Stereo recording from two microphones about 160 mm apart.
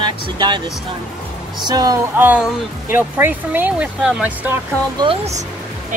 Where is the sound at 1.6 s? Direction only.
25° right (ahead or behind).